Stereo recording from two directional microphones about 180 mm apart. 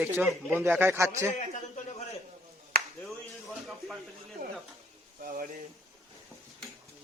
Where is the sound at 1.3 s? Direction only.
40° left (ahead or behind).